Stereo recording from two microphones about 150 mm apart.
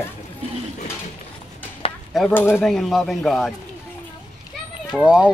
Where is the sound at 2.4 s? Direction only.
15° left (ahead or behind).